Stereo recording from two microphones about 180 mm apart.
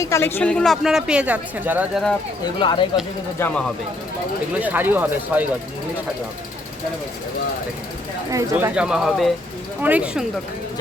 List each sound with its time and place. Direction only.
0.0 s speech: 15° left (ahead or behind); by 2.0 s 10° right (ahead or behind)
2.6 s speech: 25° left (ahead or behind)
3.3 s speech: 10° left (ahead or behind)
4.6 s speech: 10° right (ahead or behind)
8.3 s speech: 15° right (ahead or behind)
8.7 s speech: 5° right (ahead or behind)